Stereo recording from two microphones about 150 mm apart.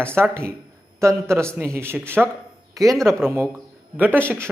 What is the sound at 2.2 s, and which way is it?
Speech, 5° right (ahead or behind).